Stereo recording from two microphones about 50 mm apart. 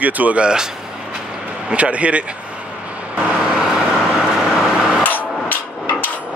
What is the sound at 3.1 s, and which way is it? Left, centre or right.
Vehicle, right.